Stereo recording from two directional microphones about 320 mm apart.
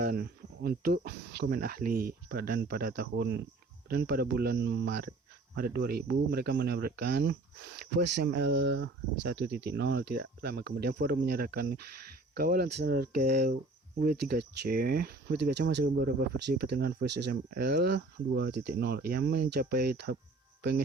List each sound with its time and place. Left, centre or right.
0.0 s speech: right